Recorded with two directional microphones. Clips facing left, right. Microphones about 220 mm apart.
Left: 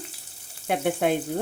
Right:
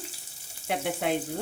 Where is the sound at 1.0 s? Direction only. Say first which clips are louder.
Left 5 dB; 50° left (ahead or behind).